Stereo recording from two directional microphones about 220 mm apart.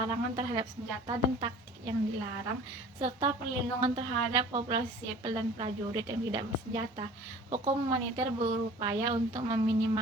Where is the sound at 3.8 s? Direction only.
20° right (ahead or behind).